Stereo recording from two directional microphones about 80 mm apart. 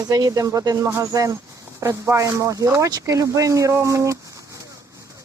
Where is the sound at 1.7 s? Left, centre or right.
Right.